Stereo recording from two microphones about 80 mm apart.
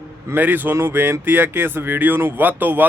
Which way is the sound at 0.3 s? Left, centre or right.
Right.